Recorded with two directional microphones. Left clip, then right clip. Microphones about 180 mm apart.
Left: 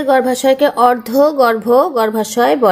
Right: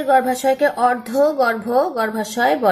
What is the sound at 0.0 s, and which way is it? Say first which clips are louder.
A woman's voice: left 3 dB; 45° left (ahead or behind).